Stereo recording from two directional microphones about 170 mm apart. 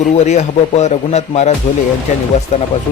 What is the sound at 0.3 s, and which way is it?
Speech, 40° left (ahead or behind).